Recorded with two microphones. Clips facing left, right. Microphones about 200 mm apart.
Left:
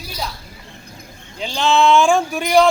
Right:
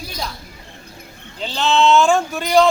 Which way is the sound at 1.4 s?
10° left (ahead or behind).